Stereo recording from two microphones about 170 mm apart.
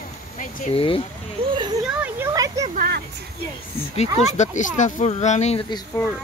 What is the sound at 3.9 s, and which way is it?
Speech, 40° left (ahead or behind).